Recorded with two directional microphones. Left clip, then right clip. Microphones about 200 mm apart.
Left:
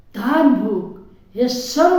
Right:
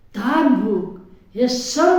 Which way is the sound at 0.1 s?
5° left (ahead or behind).